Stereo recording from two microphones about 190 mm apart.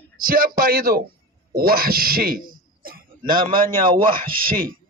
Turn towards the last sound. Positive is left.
turn(degrees=-50)  # may be behind; listen again after turning